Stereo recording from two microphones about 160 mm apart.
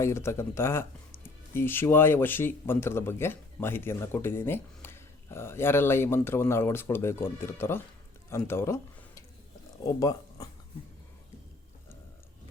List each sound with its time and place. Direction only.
0.0 s speech: 15° left (ahead or behind)